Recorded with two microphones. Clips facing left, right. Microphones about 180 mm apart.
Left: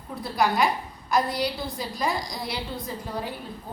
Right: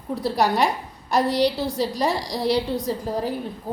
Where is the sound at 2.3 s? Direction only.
30° right (ahead or behind).